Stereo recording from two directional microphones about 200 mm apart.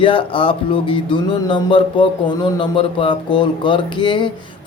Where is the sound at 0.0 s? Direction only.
25° left (ahead or behind).